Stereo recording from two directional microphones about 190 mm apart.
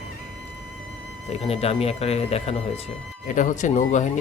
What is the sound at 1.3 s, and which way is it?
Speech, 30° left (ahead or behind).